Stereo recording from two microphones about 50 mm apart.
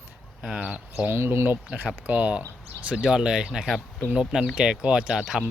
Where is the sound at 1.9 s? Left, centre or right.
Right.